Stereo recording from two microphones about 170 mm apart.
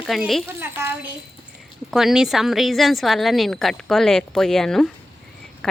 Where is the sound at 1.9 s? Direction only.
Centre (ahead or behind).